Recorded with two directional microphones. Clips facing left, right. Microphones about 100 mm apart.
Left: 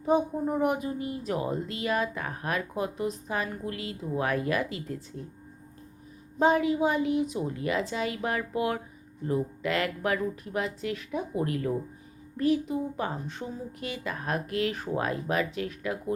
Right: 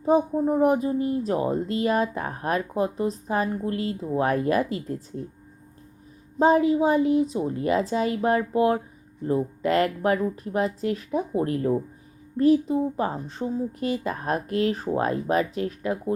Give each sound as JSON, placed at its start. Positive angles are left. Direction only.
{"t": 0.0, "sound": "speech", "side_deg": -35}
{"t": 6.4, "sound": "speech", "side_deg": -35}